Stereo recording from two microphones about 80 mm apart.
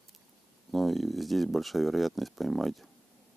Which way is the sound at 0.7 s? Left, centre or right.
Centre.